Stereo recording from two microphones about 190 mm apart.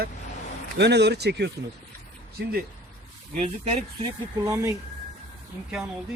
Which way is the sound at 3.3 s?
35° right (ahead or behind).